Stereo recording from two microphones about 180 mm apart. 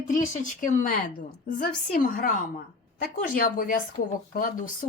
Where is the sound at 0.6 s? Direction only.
45° left (ahead or behind).